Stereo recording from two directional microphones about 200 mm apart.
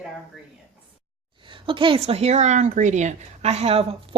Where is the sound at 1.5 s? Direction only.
25° right (ahead or behind).